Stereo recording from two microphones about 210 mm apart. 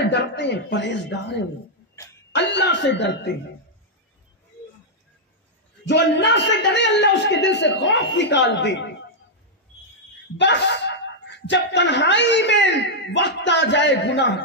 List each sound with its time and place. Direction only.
0.0 s a man's voice: 55° left (ahead or behind)
2.3 s a man's voice: 55° left (ahead or behind)
5.9 s a man's voice: 55° left (ahead or behind)
10.4 s speech: 55° left (ahead or behind)